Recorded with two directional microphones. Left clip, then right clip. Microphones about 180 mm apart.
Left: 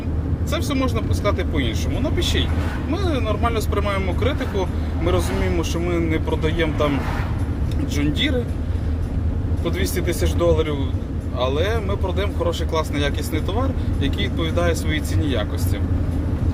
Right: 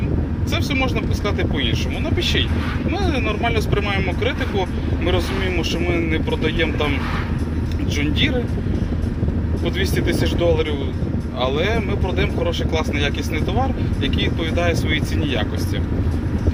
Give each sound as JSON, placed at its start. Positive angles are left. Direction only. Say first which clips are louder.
{"t": 0.5, "sound": "speech", "louder": "right 2 dB", "side_deg": 20}
{"t": 5.9, "sound": "speech", "louder": "right 1 dB", "side_deg": 20}
{"t": 7.9, "sound": "speech", "louder": "right 1 dB", "side_deg": 15}
{"t": 9.6, "sound": "speech", "louder": "right 2 dB", "side_deg": 15}